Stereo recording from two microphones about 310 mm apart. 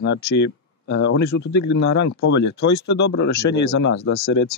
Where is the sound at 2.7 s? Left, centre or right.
Left.